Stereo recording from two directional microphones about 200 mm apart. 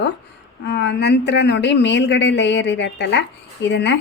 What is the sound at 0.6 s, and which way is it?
Speech, 60° left (ahead or behind).